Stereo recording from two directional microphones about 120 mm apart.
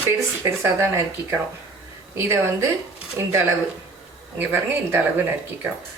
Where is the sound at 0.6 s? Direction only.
20° right (ahead or behind).